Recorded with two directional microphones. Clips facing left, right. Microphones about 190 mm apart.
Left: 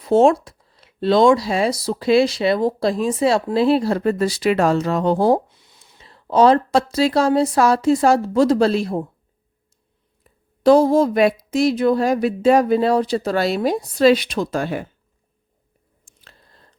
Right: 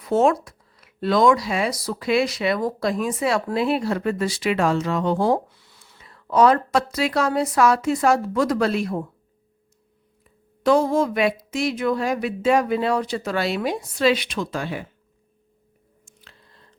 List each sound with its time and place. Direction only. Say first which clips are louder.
0.0 s speech: left 5 dB; 30° left (ahead or behind)
5.5 s a sound: even; 20° left (ahead or behind)
6.1 s speech: left 3 dB; 30° left (ahead or behind)
10.2 s speech: left 6 dB; 35° left (ahead or behind)
16.0 s biting: left 1 dB; 40° left (ahead or behind)